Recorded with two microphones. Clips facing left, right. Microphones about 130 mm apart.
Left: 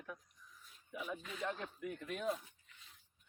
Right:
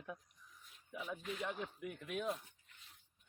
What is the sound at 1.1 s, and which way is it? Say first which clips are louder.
Speech: right 1 dB; 15° right (ahead or behind).